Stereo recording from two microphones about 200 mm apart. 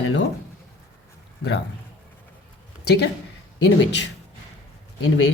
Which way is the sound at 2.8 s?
55° left (ahead or behind).